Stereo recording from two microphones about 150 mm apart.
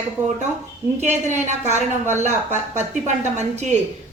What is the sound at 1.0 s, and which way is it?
A woman's voice, 50° right (ahead or behind).